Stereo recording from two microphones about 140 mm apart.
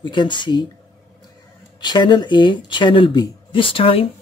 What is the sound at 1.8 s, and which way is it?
Speech, 30° left (ahead or behind).